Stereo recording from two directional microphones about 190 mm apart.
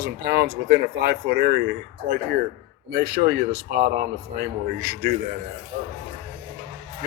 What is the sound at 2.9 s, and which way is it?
Speech, 55° right (ahead or behind).